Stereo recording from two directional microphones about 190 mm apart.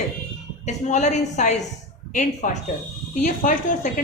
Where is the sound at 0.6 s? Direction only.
40° left (ahead or behind).